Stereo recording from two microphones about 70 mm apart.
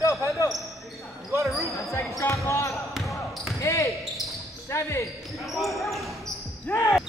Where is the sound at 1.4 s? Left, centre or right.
Centre.